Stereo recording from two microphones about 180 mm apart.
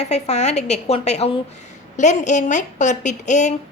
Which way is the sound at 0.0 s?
40° left (ahead or behind).